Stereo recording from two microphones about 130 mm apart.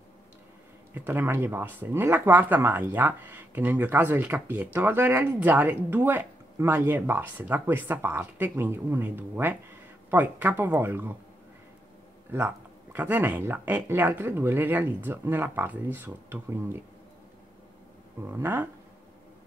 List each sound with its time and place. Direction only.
0.9 s speech: 15° right (ahead or behind)
12.3 s speech: 15° right (ahead or behind)
18.2 s speech: 15° right (ahead or behind)